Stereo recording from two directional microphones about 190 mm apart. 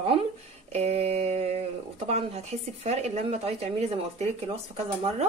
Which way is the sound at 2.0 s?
35° right (ahead or behind).